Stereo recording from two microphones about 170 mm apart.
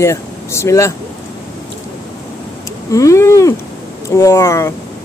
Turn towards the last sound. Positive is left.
turn(degrees=15)  # may be behind; listen again after turning